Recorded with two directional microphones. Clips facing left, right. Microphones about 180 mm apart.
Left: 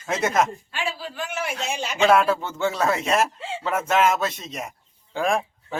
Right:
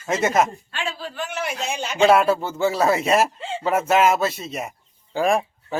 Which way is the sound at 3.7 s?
10° right (ahead or behind).